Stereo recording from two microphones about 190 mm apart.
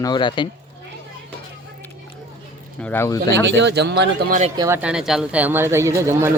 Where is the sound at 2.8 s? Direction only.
10° left (ahead or behind).